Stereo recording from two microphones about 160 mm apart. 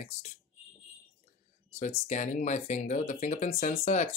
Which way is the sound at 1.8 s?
45° left (ahead or behind).